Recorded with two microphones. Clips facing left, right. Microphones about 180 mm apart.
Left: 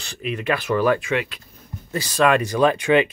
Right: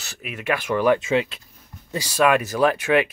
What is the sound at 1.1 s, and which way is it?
Speech, 25° right (ahead or behind).